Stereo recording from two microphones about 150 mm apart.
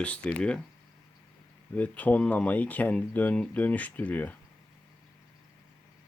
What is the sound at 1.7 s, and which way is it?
Speech, 10° left (ahead or behind).